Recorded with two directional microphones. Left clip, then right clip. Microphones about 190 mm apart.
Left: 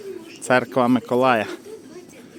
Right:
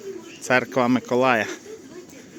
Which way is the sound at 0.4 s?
20° left (ahead or behind).